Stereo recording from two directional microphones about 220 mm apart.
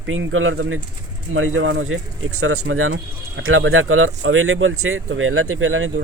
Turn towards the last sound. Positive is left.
turn(degrees=-65)  # may be behind; listen again after turning